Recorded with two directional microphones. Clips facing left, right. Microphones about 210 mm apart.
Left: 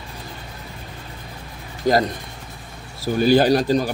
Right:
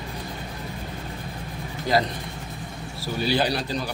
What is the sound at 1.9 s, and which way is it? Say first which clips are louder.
Speech: left 5 dB; 45° left (ahead or behind).